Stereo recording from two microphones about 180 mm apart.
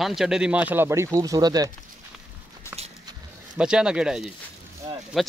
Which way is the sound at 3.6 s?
5° right (ahead or behind).